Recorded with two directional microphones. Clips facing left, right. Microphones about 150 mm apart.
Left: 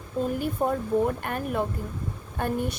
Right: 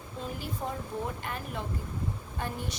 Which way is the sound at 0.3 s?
55° left (ahead or behind).